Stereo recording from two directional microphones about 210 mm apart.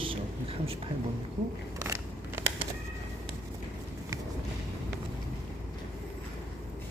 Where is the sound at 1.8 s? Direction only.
15° right (ahead or behind).